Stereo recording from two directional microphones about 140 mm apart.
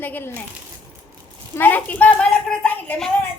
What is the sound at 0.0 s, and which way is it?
Speech, 15° left (ahead or behind).